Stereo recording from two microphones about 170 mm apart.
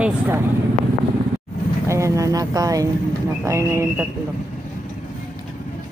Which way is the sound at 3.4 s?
15° right (ahead or behind).